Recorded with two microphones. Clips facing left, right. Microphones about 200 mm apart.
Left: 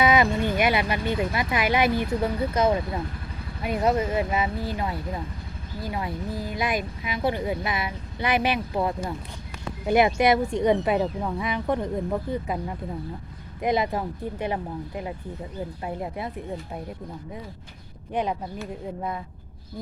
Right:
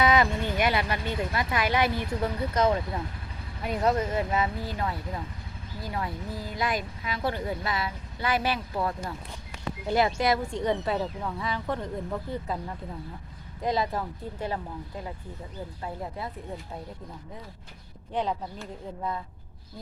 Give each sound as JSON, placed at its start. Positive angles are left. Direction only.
{"t": 0.0, "sound": "a sound", "side_deg": 10}
{"t": 2.0, "sound": "speech", "side_deg": 5}
{"t": 18.1, "sound": "speech", "side_deg": 15}